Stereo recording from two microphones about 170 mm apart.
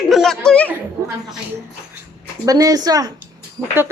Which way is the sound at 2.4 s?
20° right (ahead or behind).